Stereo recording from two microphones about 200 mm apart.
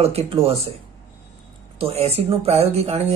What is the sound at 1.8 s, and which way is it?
Speech, 30° right (ahead or behind).